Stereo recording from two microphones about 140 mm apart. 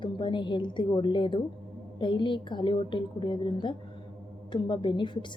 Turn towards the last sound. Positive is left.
turn(degrees=35)  # may be behind; listen again after turning